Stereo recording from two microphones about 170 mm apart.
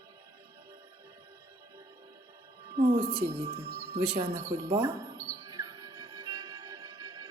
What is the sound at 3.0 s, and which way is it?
Speech, 30° right (ahead or behind).